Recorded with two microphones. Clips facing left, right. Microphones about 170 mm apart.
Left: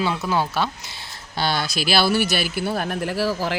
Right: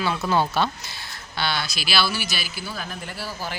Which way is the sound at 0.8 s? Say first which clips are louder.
Even; 25° left (ahead or behind).